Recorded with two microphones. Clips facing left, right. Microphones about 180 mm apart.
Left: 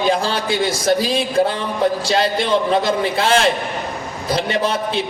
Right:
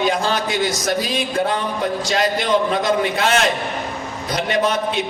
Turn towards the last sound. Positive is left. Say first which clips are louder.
# even
turn(degrees=30)  # may be behind; listen again after turning